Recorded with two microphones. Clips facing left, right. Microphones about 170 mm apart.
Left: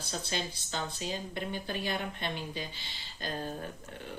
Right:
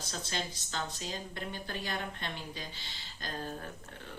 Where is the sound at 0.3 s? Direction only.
15° left (ahead or behind).